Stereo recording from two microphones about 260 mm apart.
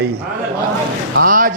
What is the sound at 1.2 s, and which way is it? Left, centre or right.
Speech, right.